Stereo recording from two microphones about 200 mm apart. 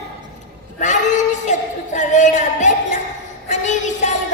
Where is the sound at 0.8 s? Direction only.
35° left (ahead or behind).